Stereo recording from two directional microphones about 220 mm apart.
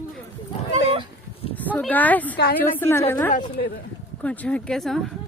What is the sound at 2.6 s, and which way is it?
Speech, 10° left (ahead or behind).